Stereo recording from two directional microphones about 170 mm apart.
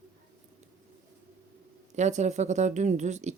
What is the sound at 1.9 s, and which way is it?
Speech, 45° right (ahead or behind).